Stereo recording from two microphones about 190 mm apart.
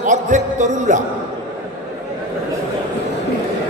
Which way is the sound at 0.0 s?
40° right (ahead or behind).